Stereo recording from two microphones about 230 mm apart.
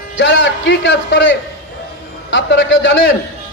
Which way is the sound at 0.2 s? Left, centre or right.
Left.